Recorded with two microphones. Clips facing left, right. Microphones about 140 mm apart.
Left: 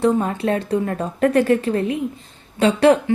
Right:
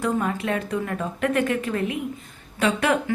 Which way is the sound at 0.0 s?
30° left (ahead or behind).